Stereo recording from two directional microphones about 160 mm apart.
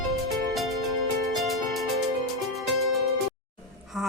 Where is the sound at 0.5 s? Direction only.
Centre (ahead or behind).